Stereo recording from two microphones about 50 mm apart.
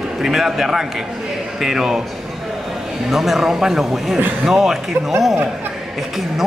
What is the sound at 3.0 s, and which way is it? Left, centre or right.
A man's voice, centre.